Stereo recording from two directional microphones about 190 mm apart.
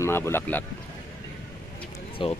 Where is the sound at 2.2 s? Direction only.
30° left (ahead or behind).